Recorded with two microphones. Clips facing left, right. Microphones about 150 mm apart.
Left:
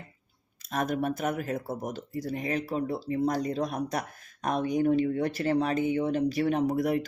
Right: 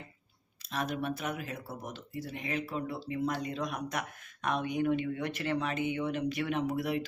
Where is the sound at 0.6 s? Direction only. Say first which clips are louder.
Left 5 dB; 45° left (ahead or behind).